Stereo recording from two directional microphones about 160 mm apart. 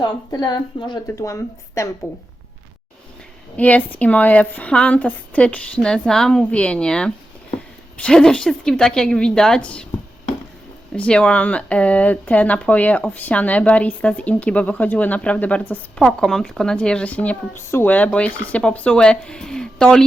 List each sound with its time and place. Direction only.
0.0 s a woman's voice: 25° left (ahead or behind)
3.6 s a woman's voice: 10° left (ahead or behind)
10.9 s speech: 5° left (ahead or behind)